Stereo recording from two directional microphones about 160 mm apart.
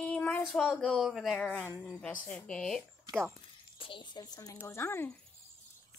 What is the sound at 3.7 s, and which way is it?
Speech, 35° left (ahead or behind).